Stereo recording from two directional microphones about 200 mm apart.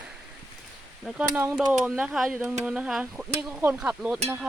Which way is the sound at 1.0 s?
5° right (ahead or behind).